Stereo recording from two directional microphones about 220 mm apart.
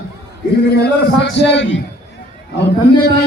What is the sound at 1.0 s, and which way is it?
Speech, 50° left (ahead or behind).